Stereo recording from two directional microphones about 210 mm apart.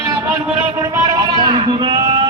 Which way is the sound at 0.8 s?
20° right (ahead or behind).